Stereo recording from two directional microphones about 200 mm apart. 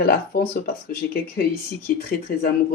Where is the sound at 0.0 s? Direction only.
50° left (ahead or behind).